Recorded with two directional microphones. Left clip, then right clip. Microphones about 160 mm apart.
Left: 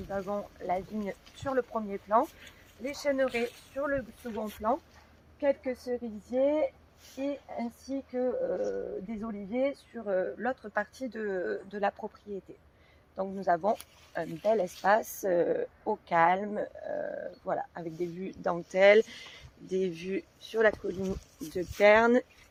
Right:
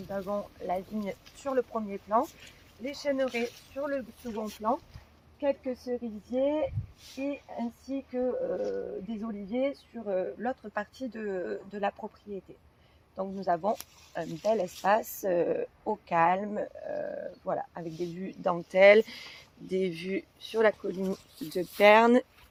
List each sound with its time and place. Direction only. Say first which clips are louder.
0.1 s speech: right 1 dB; 50° right (ahead or behind); by 2.3 s 30° right (ahead or behind)
2.8 s speech: left 1 dB; 15° right (ahead or behind); by 22.3 s 90° right